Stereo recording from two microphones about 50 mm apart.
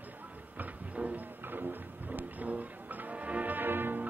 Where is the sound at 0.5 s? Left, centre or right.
Right.